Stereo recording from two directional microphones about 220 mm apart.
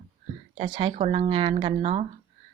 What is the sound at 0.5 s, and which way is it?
Speech, 25° right (ahead or behind).